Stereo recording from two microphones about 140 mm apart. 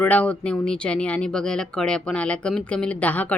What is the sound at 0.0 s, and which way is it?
Speech, 10° left (ahead or behind).